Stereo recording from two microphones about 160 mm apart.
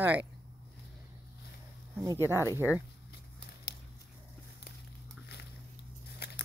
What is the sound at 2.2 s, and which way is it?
Speech, 15° left (ahead or behind).